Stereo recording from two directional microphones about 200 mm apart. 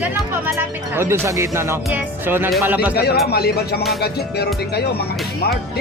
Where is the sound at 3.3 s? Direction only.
50° left (ahead or behind).